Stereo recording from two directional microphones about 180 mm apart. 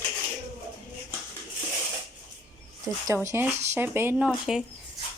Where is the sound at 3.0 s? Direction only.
15° right (ahead or behind).